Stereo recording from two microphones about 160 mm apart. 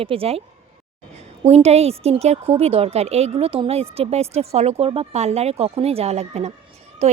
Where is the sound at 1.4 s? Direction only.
40° right (ahead or behind).